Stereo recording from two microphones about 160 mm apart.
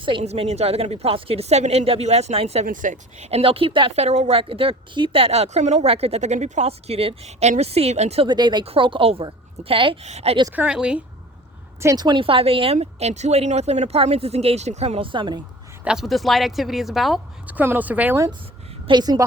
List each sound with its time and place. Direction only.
0.0 s speech: 30° right (ahead or behind)
2.6 s speech: 55° right (ahead or behind)
8.3 s speech: 25° right (ahead or behind); by 10.3 s 45° right (ahead or behind)
10.5 s a woman's voice: 10° right (ahead or behind)
11.8 s speech: 20° right (ahead or behind)
15.8 s a woman's voice: 5° right (ahead or behind)
18.9 s a woman's voice: 25° right (ahead or behind)